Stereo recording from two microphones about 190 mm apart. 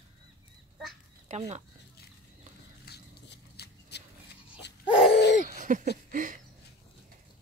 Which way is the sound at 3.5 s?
60° left (ahead or behind).